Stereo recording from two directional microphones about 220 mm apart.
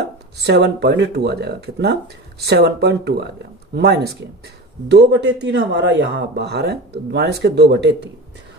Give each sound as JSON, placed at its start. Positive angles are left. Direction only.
{"t": 0.4, "sound": "speech", "side_deg": -50}